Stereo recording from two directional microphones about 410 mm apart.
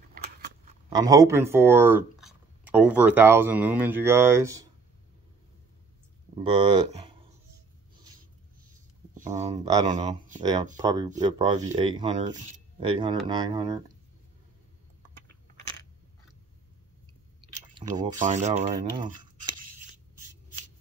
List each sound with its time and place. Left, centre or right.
0.8 s speech: centre
6.5 s speech: centre
9.2 s speech: centre
17.7 s speech: centre